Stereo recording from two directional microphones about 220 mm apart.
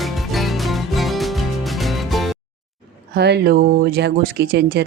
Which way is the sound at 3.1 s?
50° right (ahead or behind).